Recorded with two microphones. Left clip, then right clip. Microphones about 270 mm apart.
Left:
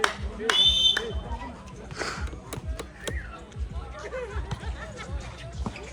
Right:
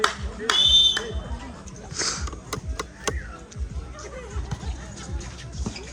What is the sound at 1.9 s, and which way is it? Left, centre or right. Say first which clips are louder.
Sniff: right 4 dB; centre.